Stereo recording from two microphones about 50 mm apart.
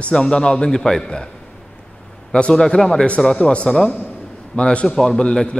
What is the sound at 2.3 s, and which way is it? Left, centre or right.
A man's voice, centre.